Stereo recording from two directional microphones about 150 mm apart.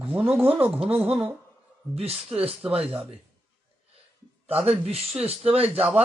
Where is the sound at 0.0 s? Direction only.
10° right (ahead or behind).